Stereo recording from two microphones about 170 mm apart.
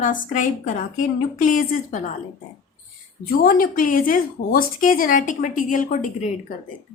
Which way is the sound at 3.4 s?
55° left (ahead or behind).